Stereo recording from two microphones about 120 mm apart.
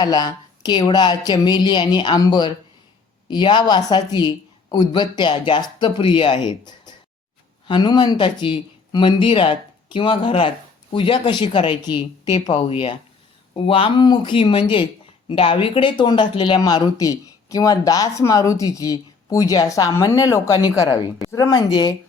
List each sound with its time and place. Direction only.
0.0 s speech: 30° left (ahead or behind)